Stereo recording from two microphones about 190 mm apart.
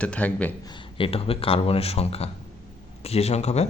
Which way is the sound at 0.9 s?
30° left (ahead or behind).